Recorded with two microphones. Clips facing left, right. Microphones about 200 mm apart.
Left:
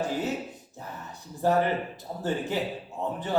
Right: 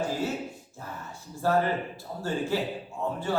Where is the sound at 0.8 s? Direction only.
20° left (ahead or behind).